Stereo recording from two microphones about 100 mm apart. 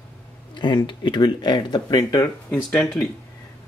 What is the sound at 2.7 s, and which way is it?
Speech, 5° left (ahead or behind).